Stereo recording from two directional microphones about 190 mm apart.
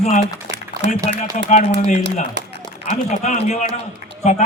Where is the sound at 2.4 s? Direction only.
65° right (ahead or behind).